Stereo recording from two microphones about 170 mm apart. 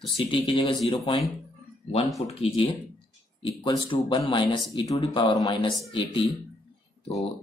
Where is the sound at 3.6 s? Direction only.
30° left (ahead or behind).